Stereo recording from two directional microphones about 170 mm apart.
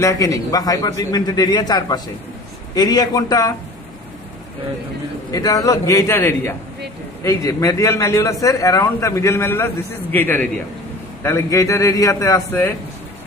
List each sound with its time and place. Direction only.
0.0 s a man's voice: 20° left (ahead or behind)
5.3 s a man's voice: 20° left (ahead or behind)